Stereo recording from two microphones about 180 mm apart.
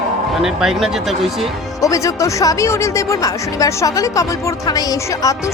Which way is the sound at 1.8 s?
20° left (ahead or behind).